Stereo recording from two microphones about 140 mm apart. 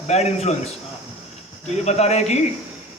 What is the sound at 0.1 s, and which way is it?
Speech, 50° left (ahead or behind).